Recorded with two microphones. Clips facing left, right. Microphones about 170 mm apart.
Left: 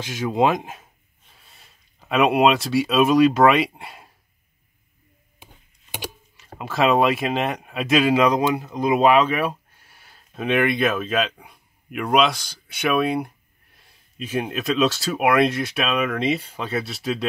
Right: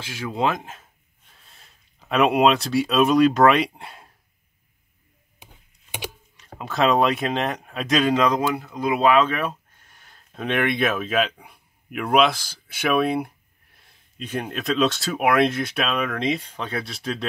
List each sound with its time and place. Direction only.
0.0 s speech: 20° left (ahead or behind)
1.3 s speech: 5° left (ahead or behind)
6.3 s speech: 5° left (ahead or behind)